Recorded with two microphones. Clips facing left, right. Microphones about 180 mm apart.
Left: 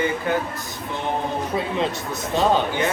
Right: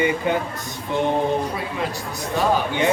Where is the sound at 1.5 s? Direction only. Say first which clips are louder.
Left 3 dB; 25° left (ahead or behind).